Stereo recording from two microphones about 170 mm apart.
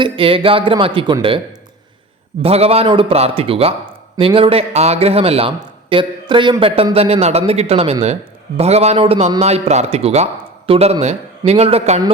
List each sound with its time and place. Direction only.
0.0 s a man's voice: 30° right (ahead or behind)
2.4 s a man's voice: 35° right (ahead or behind)